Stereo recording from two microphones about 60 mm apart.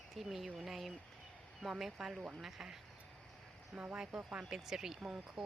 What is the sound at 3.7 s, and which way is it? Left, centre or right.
Speech, centre.